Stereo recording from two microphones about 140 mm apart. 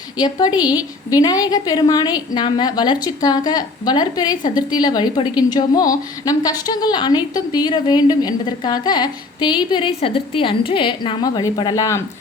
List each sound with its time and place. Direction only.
0.2 s a woman's voice: 30° left (ahead or behind)